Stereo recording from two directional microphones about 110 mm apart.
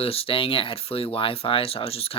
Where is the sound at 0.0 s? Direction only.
60° left (ahead or behind).